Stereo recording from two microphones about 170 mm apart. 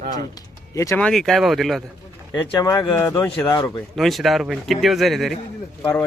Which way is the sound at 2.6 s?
25° left (ahead or behind).